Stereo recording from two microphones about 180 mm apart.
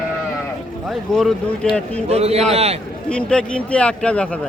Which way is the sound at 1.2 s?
Centre (ahead or behind).